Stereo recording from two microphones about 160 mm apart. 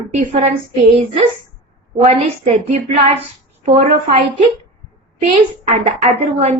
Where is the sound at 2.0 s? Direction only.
45° right (ahead or behind).